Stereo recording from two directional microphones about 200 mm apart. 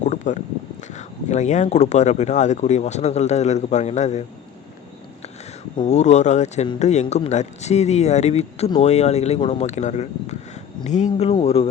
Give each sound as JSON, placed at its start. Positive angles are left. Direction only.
{"t": 0.0, "sound": "a sound", "side_deg": 35}
{"t": 0.9, "sound": "speech", "side_deg": 35}
{"t": 5.8, "sound": "speech", "side_deg": 35}